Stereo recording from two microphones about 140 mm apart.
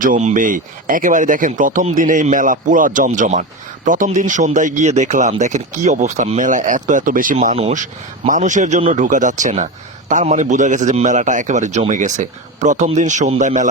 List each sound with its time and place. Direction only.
0.0 s speech: 65° right (ahead or behind)
8.3 s speech: 65° right (ahead or behind)